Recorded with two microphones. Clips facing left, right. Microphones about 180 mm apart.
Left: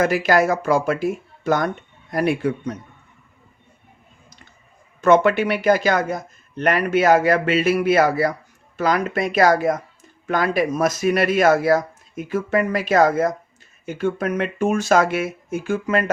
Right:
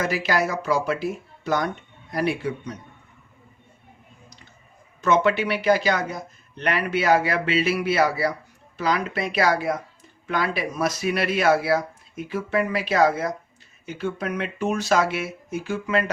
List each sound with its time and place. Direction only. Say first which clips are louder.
0.0 s speech: left 6 dB; 50° left (ahead or behind)
4.9 s speech: left 5 dB; 55° left (ahead or behind)